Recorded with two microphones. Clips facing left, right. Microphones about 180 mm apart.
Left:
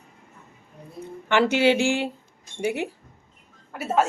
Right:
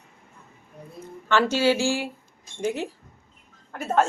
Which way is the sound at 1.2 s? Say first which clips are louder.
Left 2 dB; 15° left (ahead or behind).